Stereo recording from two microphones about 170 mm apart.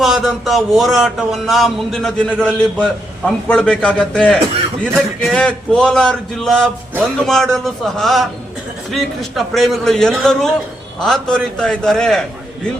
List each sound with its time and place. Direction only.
0.0 s speech: centre (ahead or behind)